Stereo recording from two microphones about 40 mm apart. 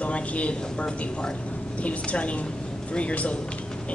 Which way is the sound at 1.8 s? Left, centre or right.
Left.